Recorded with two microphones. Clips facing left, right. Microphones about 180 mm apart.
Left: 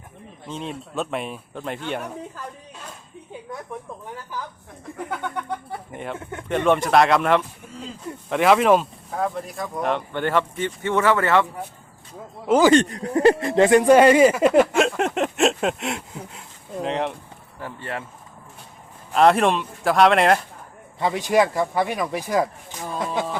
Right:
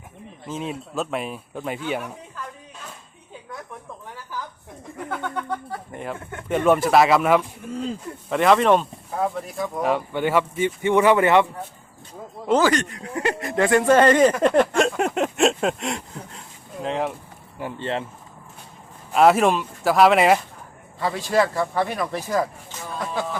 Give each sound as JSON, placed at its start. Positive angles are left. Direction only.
{"t": 0.4, "sound": "speech", "side_deg": -5}
{"t": 5.0, "sound": "speech", "side_deg": 15}
{"t": 5.9, "sound": "speech", "side_deg": 0}
{"t": 12.5, "sound": "speech", "side_deg": 10}
{"t": 12.7, "sound": "speech", "side_deg": 35}
{"t": 17.6, "sound": "speech", "side_deg": -20}
{"t": 19.1, "sound": "speech", "side_deg": -5}
{"t": 21.0, "sound": "speech", "side_deg": 20}